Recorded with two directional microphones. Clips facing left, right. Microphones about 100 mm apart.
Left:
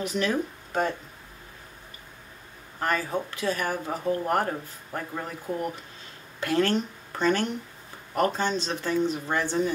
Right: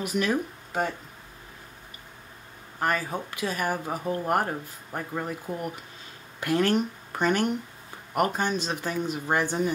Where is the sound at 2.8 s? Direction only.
15° right (ahead or behind).